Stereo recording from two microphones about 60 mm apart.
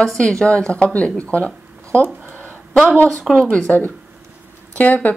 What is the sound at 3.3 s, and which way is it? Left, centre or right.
Speech, centre.